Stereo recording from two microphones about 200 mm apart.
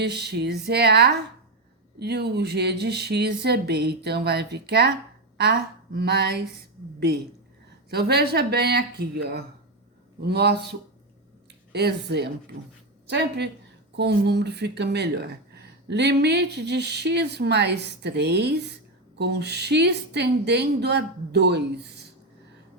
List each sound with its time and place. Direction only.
0.0 s speech: 55° right (ahead or behind)
7.9 s speech: 55° right (ahead or behind)